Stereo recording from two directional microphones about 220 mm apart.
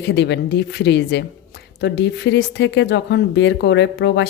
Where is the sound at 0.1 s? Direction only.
50° left (ahead or behind).